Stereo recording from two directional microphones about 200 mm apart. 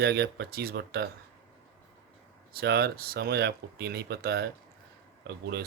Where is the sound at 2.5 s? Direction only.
50° right (ahead or behind).